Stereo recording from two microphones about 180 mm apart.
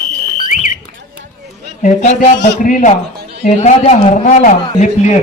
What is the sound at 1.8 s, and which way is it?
A man's voice, 40° left (ahead or behind).